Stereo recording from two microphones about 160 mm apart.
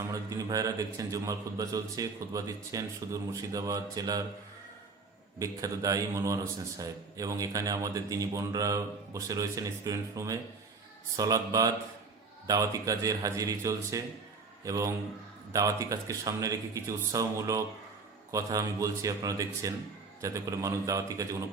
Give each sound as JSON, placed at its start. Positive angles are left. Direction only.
{"t": 0.0, "sound": "a man's voice", "side_deg": -20}
{"t": 5.4, "sound": "a man's voice", "side_deg": -20}